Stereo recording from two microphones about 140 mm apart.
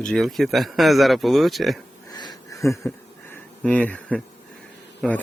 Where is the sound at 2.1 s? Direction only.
30° left (ahead or behind).